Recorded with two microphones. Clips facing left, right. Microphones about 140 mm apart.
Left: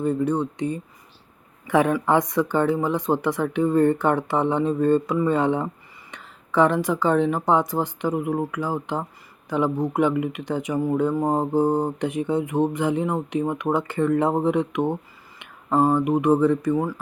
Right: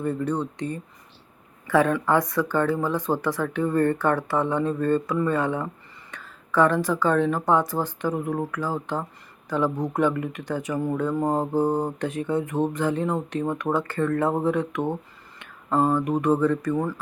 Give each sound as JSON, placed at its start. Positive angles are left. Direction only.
{"t": 0.0, "sound": "speech", "side_deg": 15}